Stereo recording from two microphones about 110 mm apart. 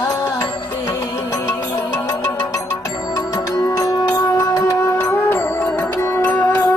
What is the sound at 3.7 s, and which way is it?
Music, 30° left (ahead or behind).